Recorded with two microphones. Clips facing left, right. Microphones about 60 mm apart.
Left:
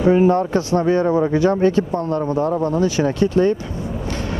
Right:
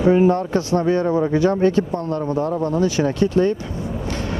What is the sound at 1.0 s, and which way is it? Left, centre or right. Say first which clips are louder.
Speech: left 2 dB; left.